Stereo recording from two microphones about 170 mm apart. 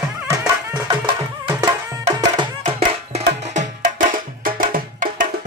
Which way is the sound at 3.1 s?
40° right (ahead or behind).